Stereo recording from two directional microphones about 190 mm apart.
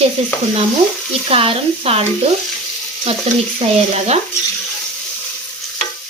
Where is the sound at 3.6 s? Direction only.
35° right (ahead or behind).